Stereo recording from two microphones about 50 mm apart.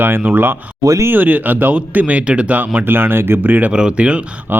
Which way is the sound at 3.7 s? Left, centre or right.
Centre.